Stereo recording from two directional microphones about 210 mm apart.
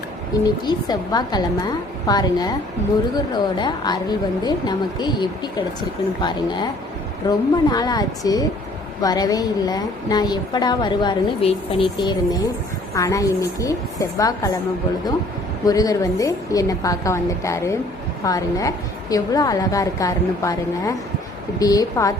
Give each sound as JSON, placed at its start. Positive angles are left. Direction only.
{"t": 0.4, "sound": "a woman's voice", "side_deg": 20}
{"t": 15.6, "sound": "a woman's voice", "side_deg": 15}